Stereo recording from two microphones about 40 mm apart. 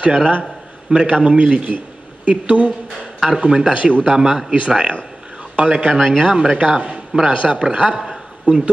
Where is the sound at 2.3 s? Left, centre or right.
Right.